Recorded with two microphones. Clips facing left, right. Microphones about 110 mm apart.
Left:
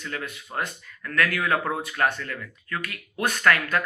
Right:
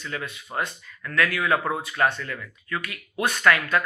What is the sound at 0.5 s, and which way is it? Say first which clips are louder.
Speech: right 1 dB; 20° right (ahead or behind).